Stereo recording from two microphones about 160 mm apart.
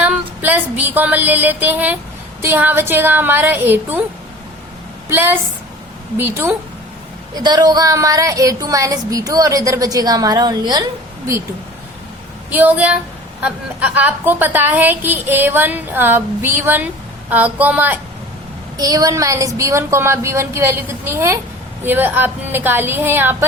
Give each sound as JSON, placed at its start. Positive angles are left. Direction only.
{"t": 0.0, "sound": "a sound", "side_deg": -10}
{"t": 2.4, "sound": "a woman's voice", "side_deg": -10}
{"t": 5.0, "sound": "a woman's voice", "side_deg": -15}
{"t": 7.3, "sound": "a woman's voice", "side_deg": -25}
{"t": 12.5, "sound": "a woman's voice", "side_deg": -10}
{"t": 18.8, "sound": "a woman's voice", "side_deg": -25}